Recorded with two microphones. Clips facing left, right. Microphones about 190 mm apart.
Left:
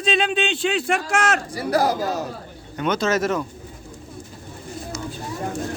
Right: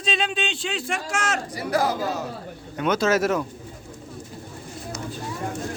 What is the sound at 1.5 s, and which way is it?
Speech, 35° left (ahead or behind).